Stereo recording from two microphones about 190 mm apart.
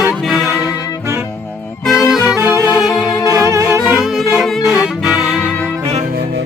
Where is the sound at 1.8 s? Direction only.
Centre (ahead or behind).